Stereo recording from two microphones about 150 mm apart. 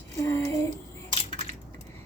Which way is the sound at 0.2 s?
20° left (ahead or behind).